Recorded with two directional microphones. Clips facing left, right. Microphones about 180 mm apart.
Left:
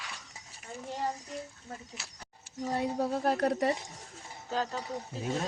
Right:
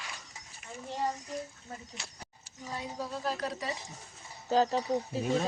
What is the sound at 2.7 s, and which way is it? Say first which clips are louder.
Speech: left 7 dB; 55° left (ahead or behind).